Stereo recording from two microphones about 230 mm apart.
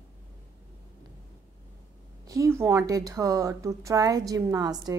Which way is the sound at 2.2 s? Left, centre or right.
Centre.